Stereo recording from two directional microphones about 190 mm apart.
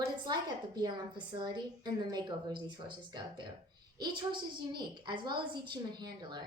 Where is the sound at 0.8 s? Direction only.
25° right (ahead or behind).